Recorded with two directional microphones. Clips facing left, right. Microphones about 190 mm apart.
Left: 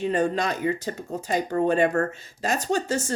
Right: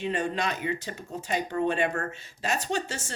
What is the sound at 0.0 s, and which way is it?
Speech, 40° left (ahead or behind).